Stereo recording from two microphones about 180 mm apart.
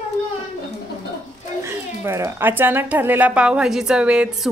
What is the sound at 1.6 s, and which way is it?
Speech, 15° right (ahead or behind).